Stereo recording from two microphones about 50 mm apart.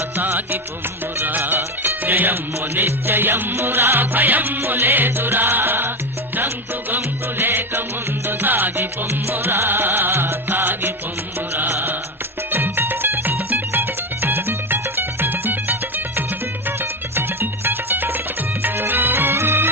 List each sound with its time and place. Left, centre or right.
0.2 s music: right
6.9 s music: right
17.2 s music: right